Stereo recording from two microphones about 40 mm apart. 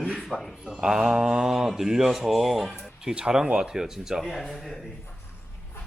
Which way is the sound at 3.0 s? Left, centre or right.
Centre.